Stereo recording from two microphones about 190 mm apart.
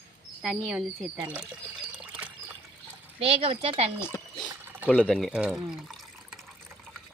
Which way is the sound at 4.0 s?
10° left (ahead or behind).